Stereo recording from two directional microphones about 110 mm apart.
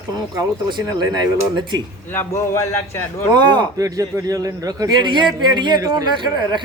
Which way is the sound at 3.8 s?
30° right (ahead or behind).